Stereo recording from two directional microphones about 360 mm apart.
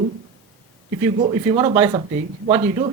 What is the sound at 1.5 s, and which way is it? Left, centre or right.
Speech, centre.